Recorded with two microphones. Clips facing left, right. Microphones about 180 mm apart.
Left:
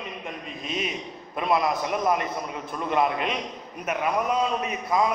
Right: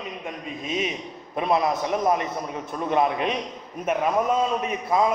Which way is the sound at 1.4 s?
20° right (ahead or behind).